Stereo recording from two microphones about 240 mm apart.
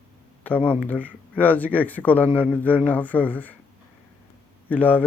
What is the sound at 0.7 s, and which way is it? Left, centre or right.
Speech, centre.